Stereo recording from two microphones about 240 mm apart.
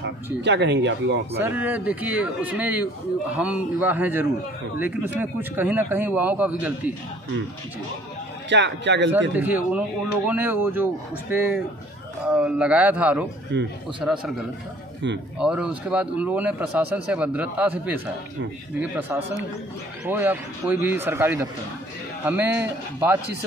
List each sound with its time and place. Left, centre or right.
0.0 s speech: right
1.4 s speech: centre
8.5 s speech: right
9.3 s a man's voice: centre
13.5 s speech: right
14.0 s a man's voice: centre
15.3 s a man's voice: centre